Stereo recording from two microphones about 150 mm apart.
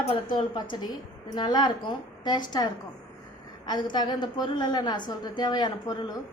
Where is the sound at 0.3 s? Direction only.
30° left (ahead or behind).